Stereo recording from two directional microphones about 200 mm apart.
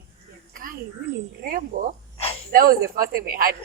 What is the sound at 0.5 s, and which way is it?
Speech, 45° right (ahead or behind).